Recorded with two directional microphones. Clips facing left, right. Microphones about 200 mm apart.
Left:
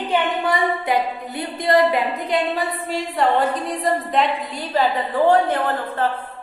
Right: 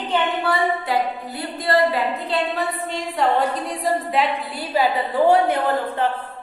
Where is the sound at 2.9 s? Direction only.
Centre (ahead or behind).